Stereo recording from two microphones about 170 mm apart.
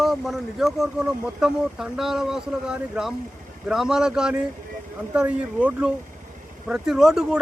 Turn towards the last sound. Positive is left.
turn(degrees=-5)  # may be behind; listen again after turning